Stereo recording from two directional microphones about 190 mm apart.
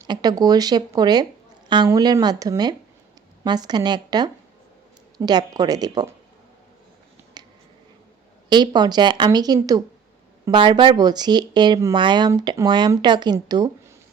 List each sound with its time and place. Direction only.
0.1 s speech: 20° right (ahead or behind)
7.4 s a sound: 20° right (ahead or behind)
8.4 s speech: 20° right (ahead or behind)